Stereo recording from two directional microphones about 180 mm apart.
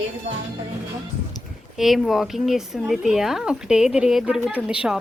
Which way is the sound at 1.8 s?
Centre (ahead or behind).